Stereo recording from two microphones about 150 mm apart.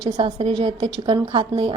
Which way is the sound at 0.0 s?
35° right (ahead or behind).